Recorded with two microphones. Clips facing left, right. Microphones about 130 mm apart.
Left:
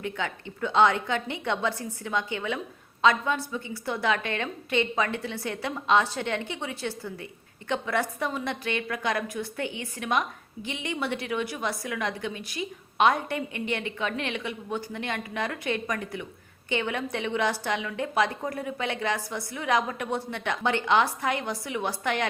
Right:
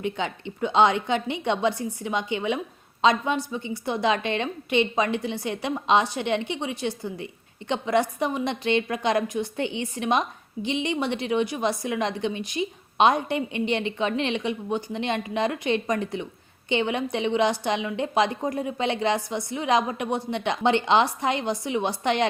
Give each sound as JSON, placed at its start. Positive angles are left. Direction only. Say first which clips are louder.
{"t": 0.0, "sound": "a woman's voice", "louder": "right 4 dB", "side_deg": -20}